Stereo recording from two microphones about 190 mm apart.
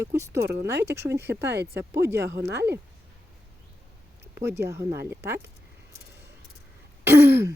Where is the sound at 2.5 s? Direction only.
60° right (ahead or behind).